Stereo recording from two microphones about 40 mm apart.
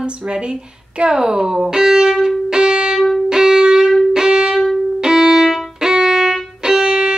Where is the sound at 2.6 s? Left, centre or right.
Right.